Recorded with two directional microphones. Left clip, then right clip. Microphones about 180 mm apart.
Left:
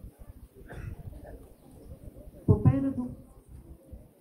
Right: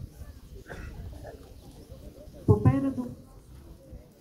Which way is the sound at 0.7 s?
35° left (ahead or behind).